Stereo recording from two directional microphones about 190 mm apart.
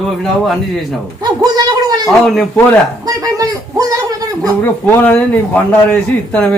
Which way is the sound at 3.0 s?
20° right (ahead or behind).